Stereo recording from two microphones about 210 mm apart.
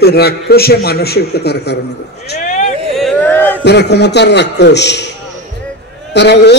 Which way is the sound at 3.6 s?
55° left (ahead or behind).